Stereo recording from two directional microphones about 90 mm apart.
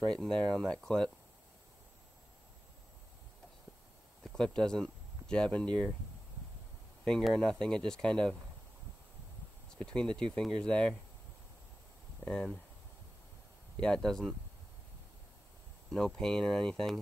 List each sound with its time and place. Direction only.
0.1 s speech: 10° left (ahead or behind)
4.2 s speech: 5° left (ahead or behind)
7.1 s speech: 5° left (ahead or behind)
9.8 s speech: 10° left (ahead or behind)
12.3 s speech: 10° left (ahead or behind)
13.7 s speech: 10° left (ahead or behind)
15.9 s speech: 5° left (ahead or behind)